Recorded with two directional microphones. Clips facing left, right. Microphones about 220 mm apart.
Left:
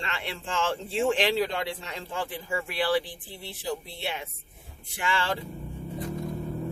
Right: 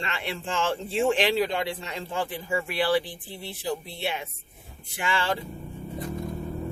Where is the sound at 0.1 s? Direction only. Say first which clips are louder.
Right 2 dB; 15° right (ahead or behind).